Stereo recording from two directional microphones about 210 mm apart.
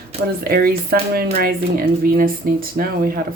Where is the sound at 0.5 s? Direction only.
45° right (ahead or behind).